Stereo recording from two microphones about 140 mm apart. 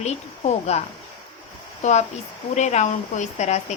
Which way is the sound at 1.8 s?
55° left (ahead or behind).